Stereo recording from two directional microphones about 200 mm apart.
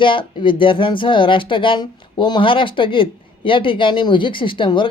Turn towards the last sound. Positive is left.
turn(degrees=25)  # may be behind; listen again after turning